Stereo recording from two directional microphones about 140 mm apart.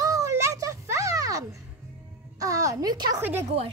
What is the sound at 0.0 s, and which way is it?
Music, 20° right (ahead or behind).